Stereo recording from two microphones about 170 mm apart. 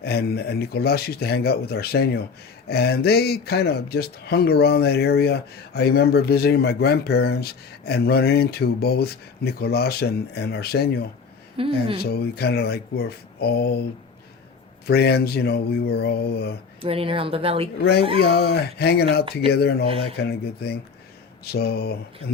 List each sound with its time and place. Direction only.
0.0 s speech: 70° left (ahead or behind)
11.5 s speech: 30° right (ahead or behind)
12.0 s speech: 70° left (ahead or behind)
14.8 s speech: 70° left (ahead or behind)
16.8 s speech: 35° right (ahead or behind)
17.7 s speech: 70° left (ahead or behind)